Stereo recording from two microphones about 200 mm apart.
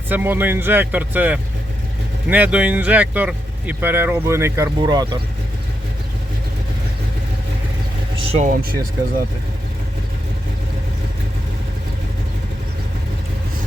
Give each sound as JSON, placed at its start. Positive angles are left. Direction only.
{"t": 0.1, "sound": "speech", "side_deg": -10}
{"t": 8.2, "sound": "speech", "side_deg": -40}